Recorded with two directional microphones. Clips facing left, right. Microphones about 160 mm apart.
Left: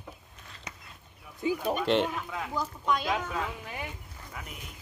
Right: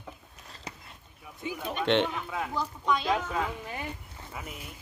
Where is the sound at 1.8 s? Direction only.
5° left (ahead or behind).